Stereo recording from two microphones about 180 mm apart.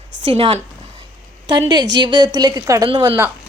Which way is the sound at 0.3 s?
30° right (ahead or behind).